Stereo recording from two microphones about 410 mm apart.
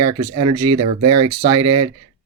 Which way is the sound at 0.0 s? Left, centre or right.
Centre.